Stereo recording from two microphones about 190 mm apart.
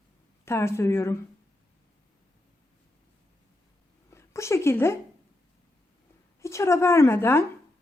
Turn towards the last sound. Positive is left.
turn(degrees=10)  # may be behind; listen again after turning